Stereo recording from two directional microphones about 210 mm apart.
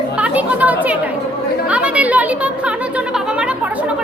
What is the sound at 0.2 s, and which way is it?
Chatter, 5° right (ahead or behind).